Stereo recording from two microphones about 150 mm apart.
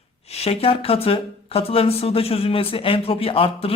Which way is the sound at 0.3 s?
45° left (ahead or behind).